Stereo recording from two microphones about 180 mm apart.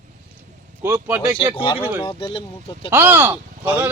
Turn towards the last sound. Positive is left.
turn(degrees=-10)  # may be behind; listen again after turning